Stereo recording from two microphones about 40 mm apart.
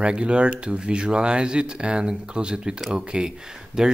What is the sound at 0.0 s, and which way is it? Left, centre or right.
Speech, right.